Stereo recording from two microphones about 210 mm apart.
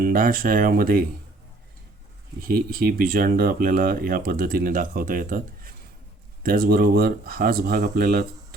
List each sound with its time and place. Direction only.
0.0 s speech: 40° right (ahead or behind)
2.4 s speech: 45° right (ahead or behind)